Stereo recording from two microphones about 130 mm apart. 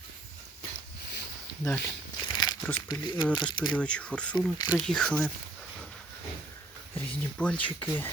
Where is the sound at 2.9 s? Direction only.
35° left (ahead or behind).